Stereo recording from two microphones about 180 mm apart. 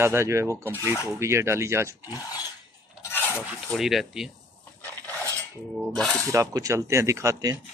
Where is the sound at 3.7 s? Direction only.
Centre (ahead or behind).